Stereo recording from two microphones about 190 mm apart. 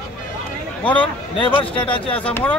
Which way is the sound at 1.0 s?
25° left (ahead or behind).